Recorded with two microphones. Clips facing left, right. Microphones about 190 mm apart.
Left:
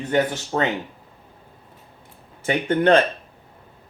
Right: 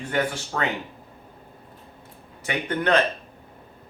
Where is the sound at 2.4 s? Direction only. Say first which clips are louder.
Left 6 dB; 30° left (ahead or behind).